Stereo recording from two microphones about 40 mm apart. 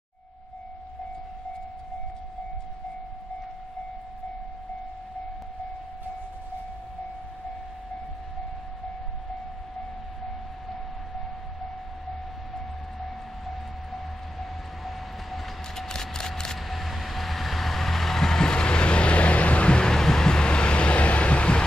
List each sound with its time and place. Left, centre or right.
9.8 s vehicle: centre
15.7 s a sound: centre
16.5 s vehicle: centre; by 21.6 s left